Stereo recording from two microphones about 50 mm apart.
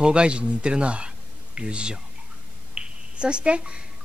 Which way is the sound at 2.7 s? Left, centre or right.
Centre.